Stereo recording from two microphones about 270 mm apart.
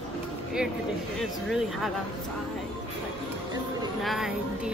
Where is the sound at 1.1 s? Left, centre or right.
Centre.